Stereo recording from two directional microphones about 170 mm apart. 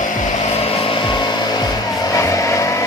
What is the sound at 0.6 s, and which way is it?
Vehicle, 30° left (ahead or behind).